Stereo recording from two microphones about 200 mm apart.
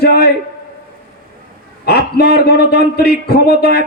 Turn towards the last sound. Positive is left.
turn(degrees=50)  # may be behind; listen again after turning